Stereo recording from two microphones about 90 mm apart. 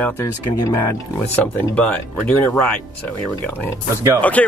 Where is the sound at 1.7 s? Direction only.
15° left (ahead or behind).